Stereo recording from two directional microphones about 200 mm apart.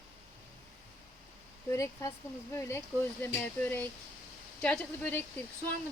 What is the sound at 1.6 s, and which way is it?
Speech, 15° left (ahead or behind).